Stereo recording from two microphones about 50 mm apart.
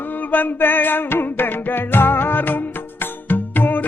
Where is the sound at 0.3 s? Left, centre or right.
Left.